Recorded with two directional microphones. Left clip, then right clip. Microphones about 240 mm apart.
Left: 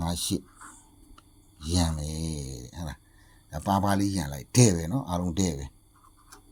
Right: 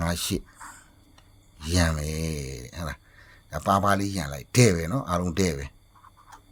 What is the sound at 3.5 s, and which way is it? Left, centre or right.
Speech, centre.